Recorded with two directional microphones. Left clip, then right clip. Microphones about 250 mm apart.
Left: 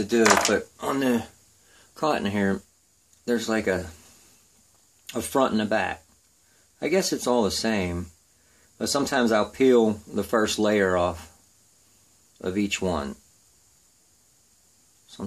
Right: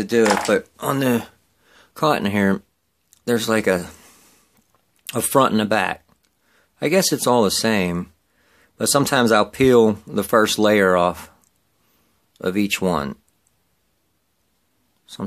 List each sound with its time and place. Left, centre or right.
0.5 s speech: right
5.0 s speech: right
12.4 s speech: right